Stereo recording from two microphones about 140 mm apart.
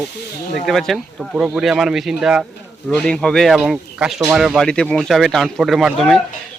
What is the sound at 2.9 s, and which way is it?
Speech, 5° left (ahead or behind).